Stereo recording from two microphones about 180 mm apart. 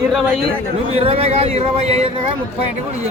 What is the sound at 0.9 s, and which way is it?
Speech, 35° right (ahead or behind).